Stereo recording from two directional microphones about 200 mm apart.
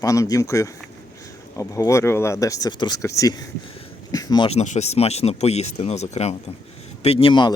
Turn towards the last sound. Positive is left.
turn(degrees=25)  # may be behind; listen again after turning